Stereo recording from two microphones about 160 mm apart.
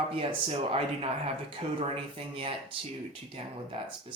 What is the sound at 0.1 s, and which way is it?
Speech, 35° right (ahead or behind).